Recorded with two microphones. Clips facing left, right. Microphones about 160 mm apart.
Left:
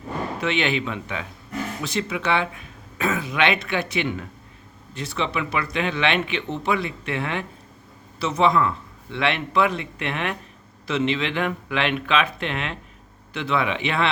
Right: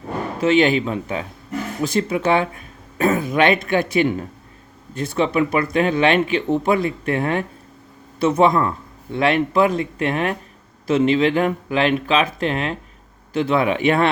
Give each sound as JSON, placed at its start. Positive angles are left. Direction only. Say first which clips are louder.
{"t": 0.3, "sound": "speech", "louder": "right 9 dB", "side_deg": -40}